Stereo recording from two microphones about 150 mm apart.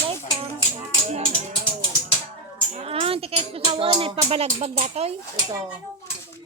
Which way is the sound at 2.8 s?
40° right (ahead or behind).